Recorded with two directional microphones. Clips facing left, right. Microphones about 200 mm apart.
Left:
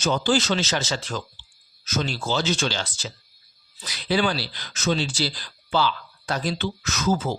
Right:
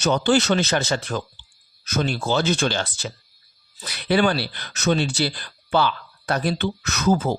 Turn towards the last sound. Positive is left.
turn(degrees=-55)  # may be behind; listen again after turning